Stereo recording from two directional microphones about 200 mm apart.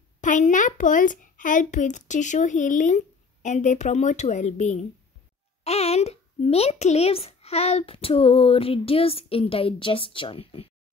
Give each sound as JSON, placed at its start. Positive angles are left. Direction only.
{"t": 0.2, "sound": "a child's voice", "side_deg": 40}